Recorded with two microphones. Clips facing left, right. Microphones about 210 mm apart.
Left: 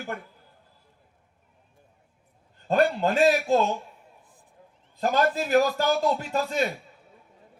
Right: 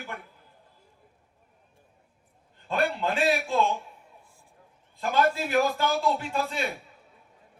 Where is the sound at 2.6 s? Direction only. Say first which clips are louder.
Left 5 dB; 40° left (ahead or behind).